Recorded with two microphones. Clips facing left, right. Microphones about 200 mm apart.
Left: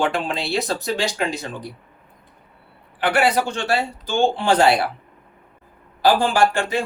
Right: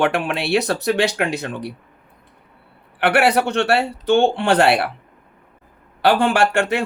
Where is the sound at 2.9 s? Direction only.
65° right (ahead or behind).